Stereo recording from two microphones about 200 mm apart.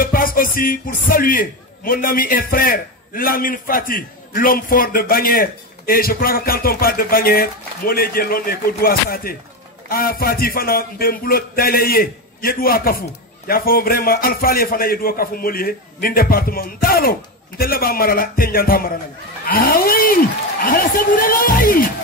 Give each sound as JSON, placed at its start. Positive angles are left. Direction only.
{"t": 0.0, "sound": "speech", "side_deg": 45}